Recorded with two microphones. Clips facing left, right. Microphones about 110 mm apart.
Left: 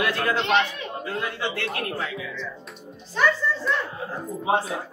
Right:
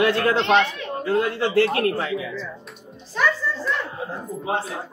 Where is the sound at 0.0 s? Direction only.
25° right (ahead or behind).